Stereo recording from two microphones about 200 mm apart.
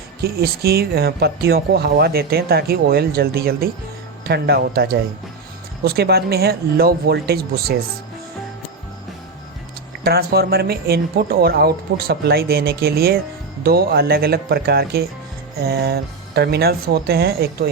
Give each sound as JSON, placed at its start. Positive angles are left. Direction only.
{"t": 0.2, "sound": "speech", "side_deg": -50}
{"t": 10.0, "sound": "speech", "side_deg": -50}